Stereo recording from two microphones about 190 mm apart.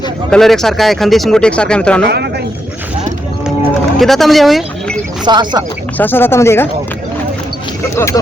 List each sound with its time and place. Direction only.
0.3 s speech: centre (ahead or behind)
3.9 s speech: centre (ahead or behind)
5.2 s speech: 25° right (ahead or behind)
6.0 s speech: 10° left (ahead or behind)
7.9 s speech: 15° left (ahead or behind)